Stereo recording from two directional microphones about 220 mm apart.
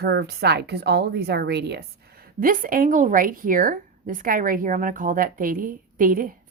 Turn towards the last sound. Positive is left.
turn(degrees=-40)  # may be behind; listen again after turning